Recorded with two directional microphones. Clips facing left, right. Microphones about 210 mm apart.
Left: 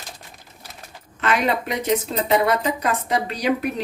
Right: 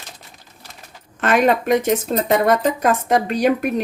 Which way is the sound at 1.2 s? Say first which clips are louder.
Right 5 dB; 50° right (ahead or behind).